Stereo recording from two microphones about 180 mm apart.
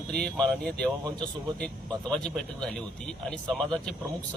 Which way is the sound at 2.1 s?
5° left (ahead or behind).